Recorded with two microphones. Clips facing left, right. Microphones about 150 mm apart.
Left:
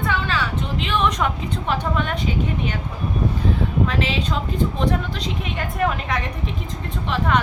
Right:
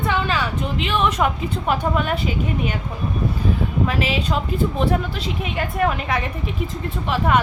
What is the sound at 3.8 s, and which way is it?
A woman's voice, 10° right (ahead or behind).